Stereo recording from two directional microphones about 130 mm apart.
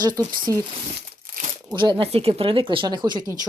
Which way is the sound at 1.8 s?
40° right (ahead or behind).